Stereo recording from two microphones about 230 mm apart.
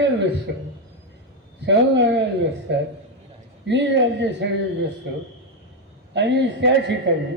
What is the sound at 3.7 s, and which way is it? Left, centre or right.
Speech, right.